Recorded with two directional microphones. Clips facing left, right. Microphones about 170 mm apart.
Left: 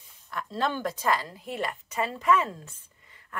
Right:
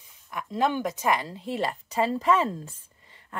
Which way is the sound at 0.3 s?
15° right (ahead or behind).